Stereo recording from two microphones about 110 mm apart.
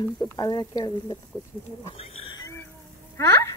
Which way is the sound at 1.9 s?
65° left (ahead or behind).